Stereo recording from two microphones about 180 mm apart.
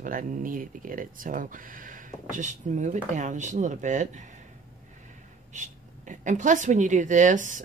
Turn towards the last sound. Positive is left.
turn(degrees=-45)  # may be behind; listen again after turning